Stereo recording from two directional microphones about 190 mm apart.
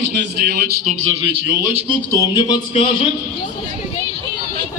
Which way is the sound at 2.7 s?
35° left (ahead or behind).